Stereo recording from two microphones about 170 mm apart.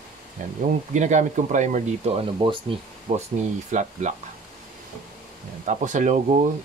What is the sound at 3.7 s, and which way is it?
Speech, 45° right (ahead or behind).